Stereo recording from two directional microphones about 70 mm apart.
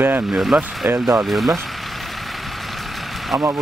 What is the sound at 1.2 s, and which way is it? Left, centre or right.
Speech, centre.